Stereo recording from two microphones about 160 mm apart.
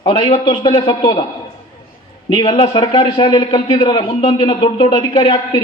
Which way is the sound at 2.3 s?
35° left (ahead or behind).